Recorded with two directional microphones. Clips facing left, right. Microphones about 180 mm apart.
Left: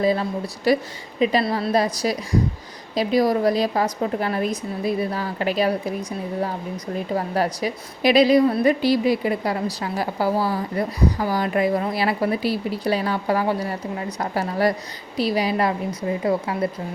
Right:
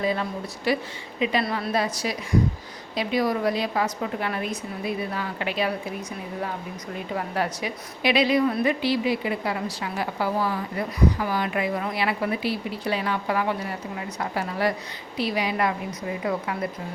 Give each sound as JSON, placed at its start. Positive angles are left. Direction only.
{"t": 0.0, "sound": "a woman's voice", "side_deg": 35}
{"t": 7.1, "sound": "a woman's voice", "side_deg": 35}